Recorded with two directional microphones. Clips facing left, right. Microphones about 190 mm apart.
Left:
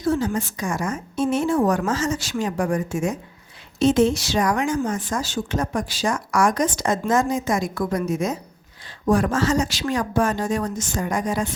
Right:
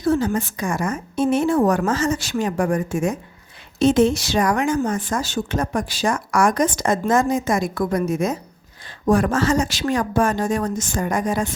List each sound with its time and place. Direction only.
0.0 s speech: 60° right (ahead or behind)